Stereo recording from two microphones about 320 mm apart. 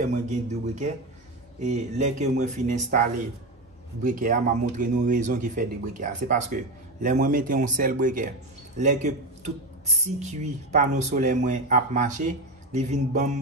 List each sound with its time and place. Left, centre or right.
0.0 s speech: right